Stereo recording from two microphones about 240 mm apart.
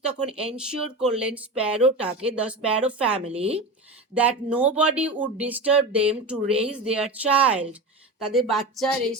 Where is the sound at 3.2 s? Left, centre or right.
Right.